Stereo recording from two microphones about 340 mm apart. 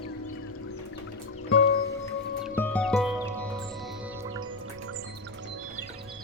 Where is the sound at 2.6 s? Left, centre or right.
Centre.